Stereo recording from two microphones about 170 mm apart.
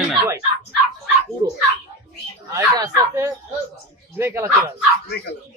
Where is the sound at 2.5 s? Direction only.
20° right (ahead or behind).